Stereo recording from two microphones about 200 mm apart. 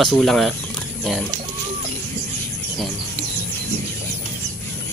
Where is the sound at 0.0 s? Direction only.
Centre (ahead or behind).